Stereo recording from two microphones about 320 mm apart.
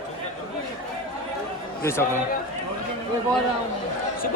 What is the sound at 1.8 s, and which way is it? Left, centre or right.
Speech, centre.